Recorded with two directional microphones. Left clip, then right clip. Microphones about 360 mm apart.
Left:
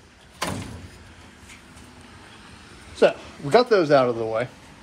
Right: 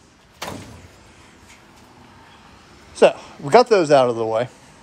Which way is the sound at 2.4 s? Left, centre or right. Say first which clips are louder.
Left 1 dB; right.